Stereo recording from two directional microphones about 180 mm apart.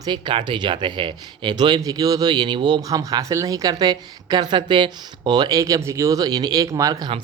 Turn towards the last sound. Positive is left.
turn(degrees=-20)  # may be behind; listen again after turning